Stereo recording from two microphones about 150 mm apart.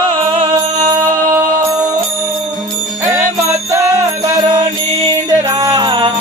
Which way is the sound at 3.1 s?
20° right (ahead or behind).